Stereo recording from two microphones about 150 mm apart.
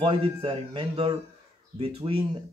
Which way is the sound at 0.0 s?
35° right (ahead or behind).